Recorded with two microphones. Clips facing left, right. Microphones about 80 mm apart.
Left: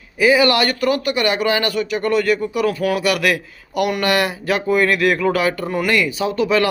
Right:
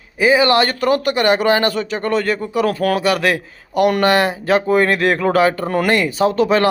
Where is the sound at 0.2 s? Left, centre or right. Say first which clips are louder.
Right 1 dB; right.